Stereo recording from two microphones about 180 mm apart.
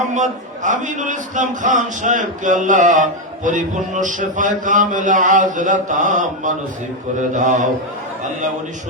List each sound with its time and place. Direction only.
0.0 s speech: 45° right (ahead or behind)